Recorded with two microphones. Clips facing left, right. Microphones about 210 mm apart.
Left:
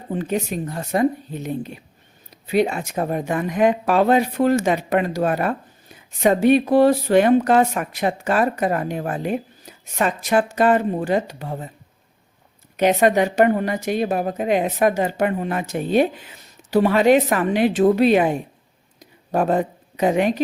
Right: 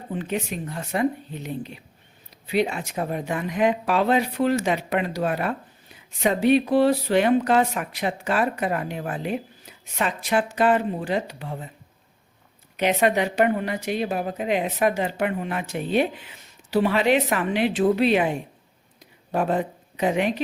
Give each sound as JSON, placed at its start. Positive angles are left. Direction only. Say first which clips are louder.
{"t": 0.1, "sound": "speech", "louder": "left 5 dB", "side_deg": 40}
{"t": 12.7, "sound": "speech", "louder": "left 5 dB", "side_deg": 45}
{"t": 18.9, "sound": "a sound", "louder": "left 4 dB", "side_deg": 45}